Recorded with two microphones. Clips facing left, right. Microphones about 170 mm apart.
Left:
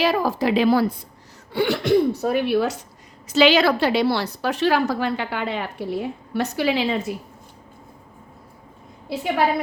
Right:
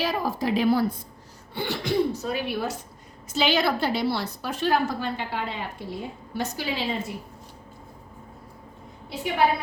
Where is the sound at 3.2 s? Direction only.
85° left.